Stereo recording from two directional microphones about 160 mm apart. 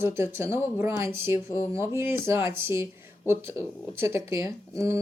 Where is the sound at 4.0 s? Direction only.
15° right (ahead or behind).